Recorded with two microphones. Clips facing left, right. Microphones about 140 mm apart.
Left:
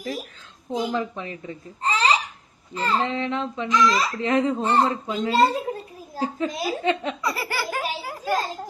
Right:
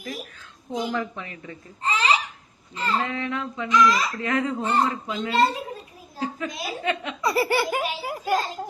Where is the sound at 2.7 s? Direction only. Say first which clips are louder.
Left 2 dB; 35° left (ahead or behind).